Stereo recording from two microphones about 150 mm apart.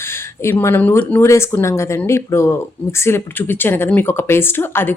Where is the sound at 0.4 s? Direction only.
15° left (ahead or behind).